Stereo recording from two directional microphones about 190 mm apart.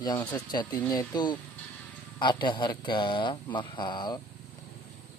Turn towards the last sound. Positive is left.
turn(degrees=20)  # may be behind; listen again after turning